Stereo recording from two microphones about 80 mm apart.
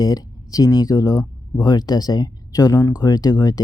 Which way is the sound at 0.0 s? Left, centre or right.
Left.